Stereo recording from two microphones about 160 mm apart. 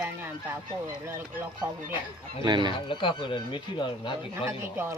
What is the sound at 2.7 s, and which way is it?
Speech, 30° left (ahead or behind).